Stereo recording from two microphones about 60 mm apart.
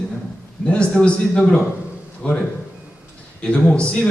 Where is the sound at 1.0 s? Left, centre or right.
Centre.